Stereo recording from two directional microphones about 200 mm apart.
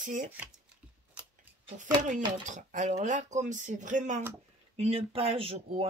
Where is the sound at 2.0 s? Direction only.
40° right (ahead or behind).